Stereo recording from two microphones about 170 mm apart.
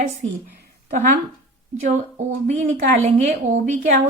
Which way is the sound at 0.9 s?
50° right (ahead or behind).